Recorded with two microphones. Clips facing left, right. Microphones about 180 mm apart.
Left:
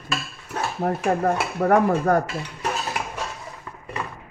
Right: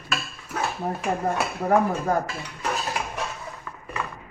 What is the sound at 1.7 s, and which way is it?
Dishes, 75° left (ahead or behind).